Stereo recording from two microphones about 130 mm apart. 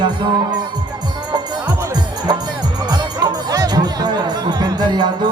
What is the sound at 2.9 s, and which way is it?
Speech, 30° right (ahead or behind).